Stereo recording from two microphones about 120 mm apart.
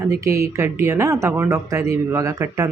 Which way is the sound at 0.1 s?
25° right (ahead or behind).